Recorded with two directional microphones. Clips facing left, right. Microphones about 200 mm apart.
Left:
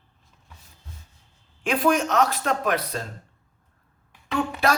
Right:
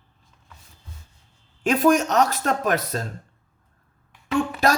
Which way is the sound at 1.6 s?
45° right (ahead or behind).